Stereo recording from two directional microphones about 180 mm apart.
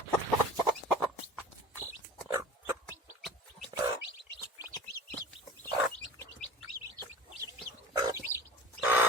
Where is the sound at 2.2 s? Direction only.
15° right (ahead or behind).